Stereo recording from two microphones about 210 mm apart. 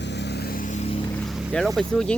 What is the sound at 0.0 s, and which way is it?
Vehicle, 55° left (ahead or behind).